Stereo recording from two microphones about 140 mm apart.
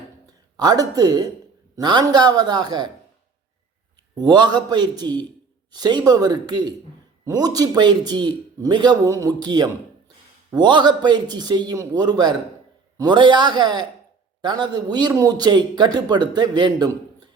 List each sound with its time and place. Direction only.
0.5 s a man's voice: 30° right (ahead or behind)
4.2 s a man's voice: 30° right (ahead or behind)